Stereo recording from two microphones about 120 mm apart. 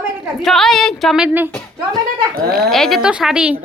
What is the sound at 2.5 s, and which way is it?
A woman's voice, centre (ahead or behind).